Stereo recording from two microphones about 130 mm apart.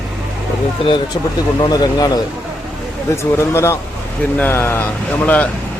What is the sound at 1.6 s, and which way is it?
Speech, 30° left (ahead or behind).